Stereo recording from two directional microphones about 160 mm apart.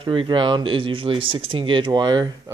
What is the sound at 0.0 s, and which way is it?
Speech, 30° right (ahead or behind).